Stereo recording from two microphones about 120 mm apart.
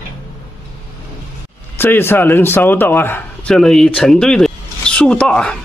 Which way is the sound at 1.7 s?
20° left (ahead or behind).